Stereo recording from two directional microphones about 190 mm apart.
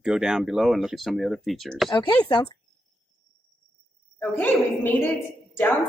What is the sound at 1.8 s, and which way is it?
Speech, 25° left (ahead or behind).